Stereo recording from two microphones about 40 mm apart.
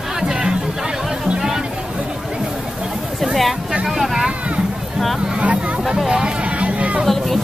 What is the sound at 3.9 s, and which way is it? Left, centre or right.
Speech, centre.